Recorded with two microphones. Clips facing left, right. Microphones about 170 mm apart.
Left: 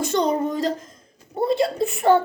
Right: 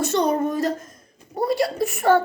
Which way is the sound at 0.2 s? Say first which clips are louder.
Even; 20° left (ahead or behind).